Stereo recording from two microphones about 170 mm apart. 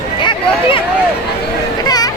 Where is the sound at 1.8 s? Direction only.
20° left (ahead or behind).